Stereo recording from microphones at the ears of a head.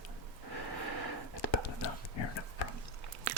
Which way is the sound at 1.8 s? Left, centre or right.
Left.